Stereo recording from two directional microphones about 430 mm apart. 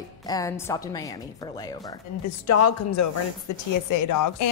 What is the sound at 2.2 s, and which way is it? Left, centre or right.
Speech, left.